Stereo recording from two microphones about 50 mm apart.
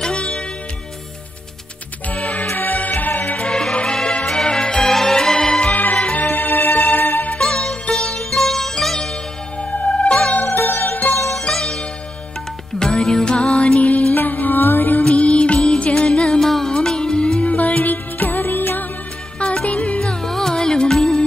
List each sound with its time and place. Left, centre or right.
0.0 s music: centre
2.1 s music: left
2.4 s music: left
3.4 s music: centre
5.7 s music: left
7.3 s music: centre
9.6 s music: left
10.4 s music: left
11.2 s music: centre; by 15.0 s left
15.0 s music: left
19.4 s music: left
20.0 s music: centre